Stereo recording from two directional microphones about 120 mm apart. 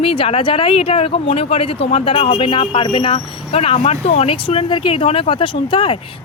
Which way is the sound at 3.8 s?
65° left (ahead or behind).